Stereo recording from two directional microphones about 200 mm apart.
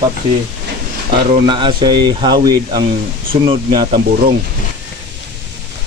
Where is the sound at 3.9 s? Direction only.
45° right (ahead or behind).